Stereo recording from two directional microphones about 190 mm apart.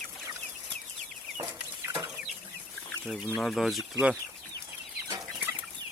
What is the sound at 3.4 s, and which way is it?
Speech, centre (ahead or behind).